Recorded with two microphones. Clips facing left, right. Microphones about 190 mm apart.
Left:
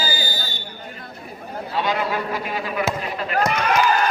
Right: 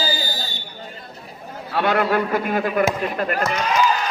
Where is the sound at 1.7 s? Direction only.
60° right (ahead or behind).